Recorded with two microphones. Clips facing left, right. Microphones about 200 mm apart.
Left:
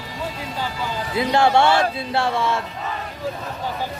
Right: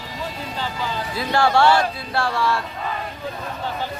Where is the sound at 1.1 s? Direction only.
20° left (ahead or behind).